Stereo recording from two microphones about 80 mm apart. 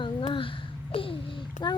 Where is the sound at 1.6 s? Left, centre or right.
Left.